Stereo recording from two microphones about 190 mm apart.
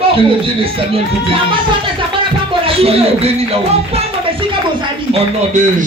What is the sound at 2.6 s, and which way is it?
Speech, 30° right (ahead or behind).